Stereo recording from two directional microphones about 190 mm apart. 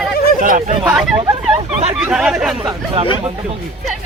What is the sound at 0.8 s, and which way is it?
Speech, 5° right (ahead or behind).